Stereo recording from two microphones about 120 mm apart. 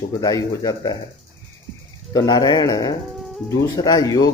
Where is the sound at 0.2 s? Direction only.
30° left (ahead or behind).